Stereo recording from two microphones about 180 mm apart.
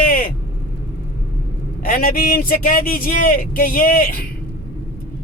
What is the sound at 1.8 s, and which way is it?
A man's voice, 55° left (ahead or behind).